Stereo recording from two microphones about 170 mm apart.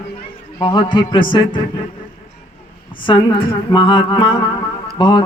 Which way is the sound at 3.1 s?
30° left (ahead or behind).